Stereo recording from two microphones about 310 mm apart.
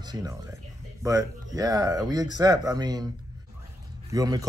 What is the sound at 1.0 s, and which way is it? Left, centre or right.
Speech, centre.